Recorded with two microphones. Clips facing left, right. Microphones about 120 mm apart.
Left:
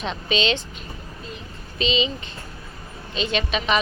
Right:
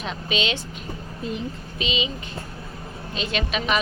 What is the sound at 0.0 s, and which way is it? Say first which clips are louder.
Speech: left 3 dB; 10° right (ahead or behind).